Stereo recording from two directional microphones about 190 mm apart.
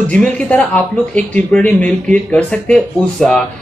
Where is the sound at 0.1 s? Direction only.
5° left (ahead or behind).